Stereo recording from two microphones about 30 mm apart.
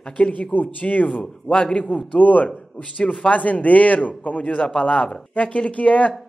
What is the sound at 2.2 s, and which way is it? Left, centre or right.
Speech, left.